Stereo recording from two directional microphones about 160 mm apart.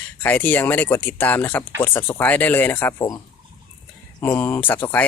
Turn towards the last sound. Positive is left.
turn(degrees=10)  # may be behind; listen again after turning